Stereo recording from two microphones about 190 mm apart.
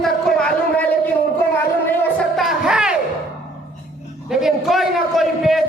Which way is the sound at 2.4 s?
5° right (ahead or behind).